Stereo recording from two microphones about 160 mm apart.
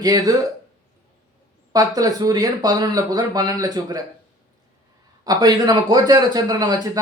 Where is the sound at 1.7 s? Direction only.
25° right (ahead or behind).